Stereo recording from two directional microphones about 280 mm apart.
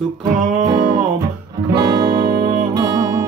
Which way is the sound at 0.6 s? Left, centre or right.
Centre.